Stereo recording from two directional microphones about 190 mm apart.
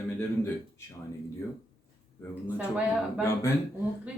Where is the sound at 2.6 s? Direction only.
5° right (ahead or behind).